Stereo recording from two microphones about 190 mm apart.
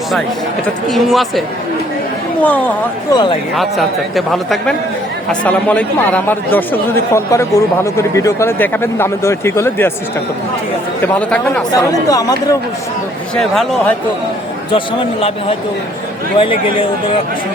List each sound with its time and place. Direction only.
0.9 s a man's voice: centre (ahead or behind)
11.0 s a man's voice: 5° left (ahead or behind)
11.7 s speech: 20° left (ahead or behind)
13.3 s a man's voice: centre (ahead or behind)
16.4 s speech: 25° left (ahead or behind)